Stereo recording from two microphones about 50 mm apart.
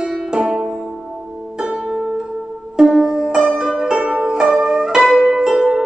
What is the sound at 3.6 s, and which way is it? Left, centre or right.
Zither, centre.